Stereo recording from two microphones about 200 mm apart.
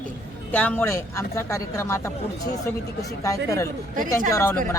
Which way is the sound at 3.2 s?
15° left (ahead or behind).